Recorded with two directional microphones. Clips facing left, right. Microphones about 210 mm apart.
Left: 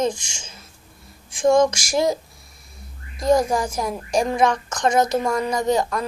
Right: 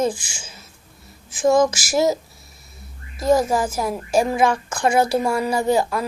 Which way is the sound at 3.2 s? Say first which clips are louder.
Right 1 dB; 5° right (ahead or behind).